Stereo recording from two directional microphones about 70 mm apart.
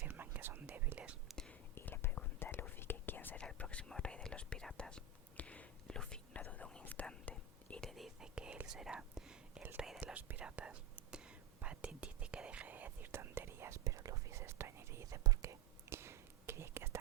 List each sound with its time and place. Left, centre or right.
0.1 s whispering: right
1.7 s whispering: left
3.3 s whispering: centre
6.4 s whispering: left
7.9 s whispering: centre; by 13.8 s right
13.8 s whispering: right
15.0 s whispering: right